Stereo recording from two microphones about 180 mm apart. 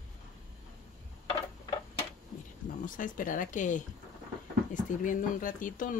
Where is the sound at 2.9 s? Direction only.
45° left (ahead or behind).